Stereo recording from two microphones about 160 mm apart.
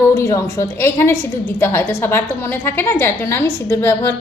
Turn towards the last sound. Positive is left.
turn(degrees=15)  # may be behind; listen again after turning